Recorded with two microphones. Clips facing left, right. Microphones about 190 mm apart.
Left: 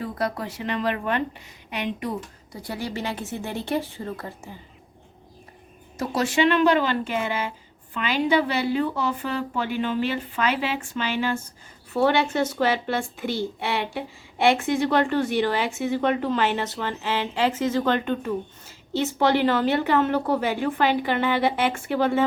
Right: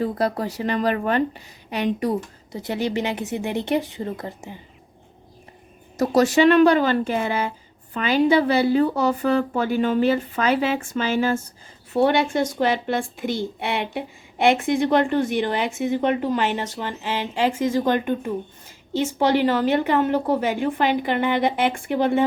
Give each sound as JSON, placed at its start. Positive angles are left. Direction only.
{"t": 0.0, "sound": "a woman's voice", "side_deg": -35}
{"t": 2.5, "sound": "a woman's voice", "side_deg": -20}
{"t": 6.0, "sound": "a woman's voice", "side_deg": -40}
{"t": 11.9, "sound": "a woman's voice", "side_deg": -15}